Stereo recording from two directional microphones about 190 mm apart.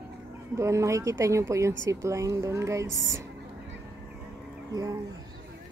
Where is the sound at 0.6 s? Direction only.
15° right (ahead or behind).